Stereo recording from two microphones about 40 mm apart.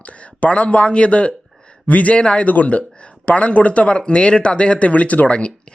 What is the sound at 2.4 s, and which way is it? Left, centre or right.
Speech, left.